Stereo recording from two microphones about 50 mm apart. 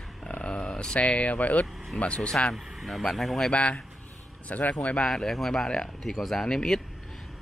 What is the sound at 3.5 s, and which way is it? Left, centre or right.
A man's voice, left.